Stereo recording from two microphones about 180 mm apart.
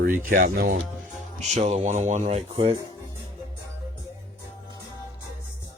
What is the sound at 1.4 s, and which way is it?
Speech, 40° right (ahead or behind).